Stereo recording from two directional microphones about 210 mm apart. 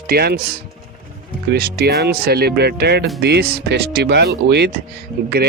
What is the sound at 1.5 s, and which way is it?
Speech, 45° right (ahead or behind).